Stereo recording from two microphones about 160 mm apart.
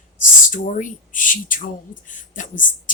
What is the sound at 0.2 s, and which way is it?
Speech, 55° left (ahead or behind).